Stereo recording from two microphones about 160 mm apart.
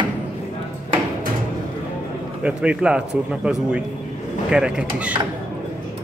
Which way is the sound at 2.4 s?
5° right (ahead or behind).